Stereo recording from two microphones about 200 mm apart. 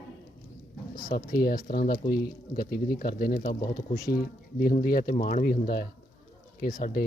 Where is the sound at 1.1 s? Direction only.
50° left (ahead or behind).